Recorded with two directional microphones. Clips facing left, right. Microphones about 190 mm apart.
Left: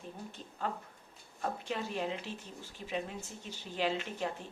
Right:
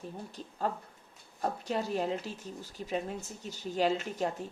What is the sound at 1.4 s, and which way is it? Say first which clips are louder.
A woman's voice: right 4 dB; 40° right (ahead or behind).